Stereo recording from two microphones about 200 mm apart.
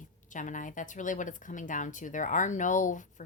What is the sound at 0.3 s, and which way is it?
Speech, 40° left (ahead or behind).